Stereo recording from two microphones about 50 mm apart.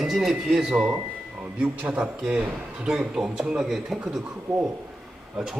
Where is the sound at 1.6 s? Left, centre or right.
Right.